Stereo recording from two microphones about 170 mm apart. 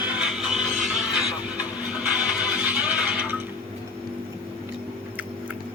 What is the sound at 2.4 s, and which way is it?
Music, 5° right (ahead or behind).